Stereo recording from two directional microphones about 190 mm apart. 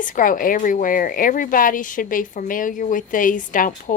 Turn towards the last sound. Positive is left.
turn(degrees=45)  # may be behind; listen again after turning